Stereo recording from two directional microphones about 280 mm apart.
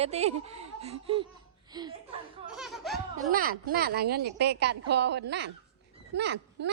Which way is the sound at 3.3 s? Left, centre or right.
Right.